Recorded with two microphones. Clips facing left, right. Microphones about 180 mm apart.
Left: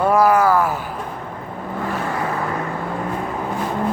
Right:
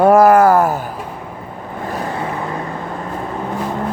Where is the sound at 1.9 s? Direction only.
40° right (ahead or behind).